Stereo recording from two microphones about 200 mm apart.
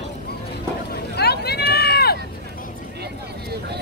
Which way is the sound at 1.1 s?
55° left (ahead or behind).